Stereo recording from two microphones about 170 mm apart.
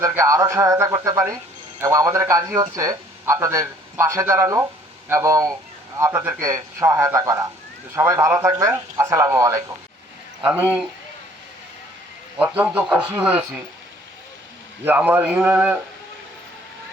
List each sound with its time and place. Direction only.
0.0 s a man's voice: 15° right (ahead or behind)
12.4 s a man's voice: 10° right (ahead or behind)
14.8 s a man's voice: 10° right (ahead or behind)